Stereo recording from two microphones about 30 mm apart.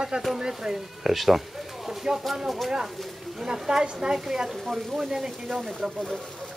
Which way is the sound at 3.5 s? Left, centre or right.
Right.